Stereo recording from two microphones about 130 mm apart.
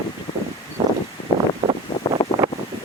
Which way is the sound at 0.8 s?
35° right (ahead or behind).